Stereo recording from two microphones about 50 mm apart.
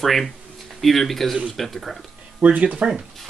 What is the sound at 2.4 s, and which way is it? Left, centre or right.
Speech, right.